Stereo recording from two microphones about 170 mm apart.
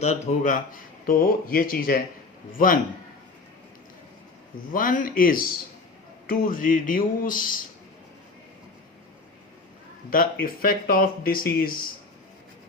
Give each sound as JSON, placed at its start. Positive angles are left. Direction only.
{"t": 0.0, "sound": "speech", "side_deg": 45}
{"t": 4.7, "sound": "speech", "side_deg": 50}
{"t": 10.1, "sound": "speech", "side_deg": 55}